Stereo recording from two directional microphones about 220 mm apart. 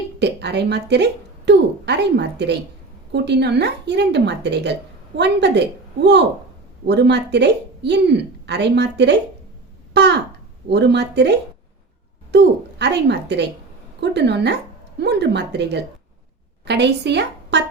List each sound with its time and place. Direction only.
0.2 s a woman's voice: 50° right (ahead or behind)
9.9 s a sound: 50° right (ahead or behind)
10.7 s a woman's voice: 50° right (ahead or behind)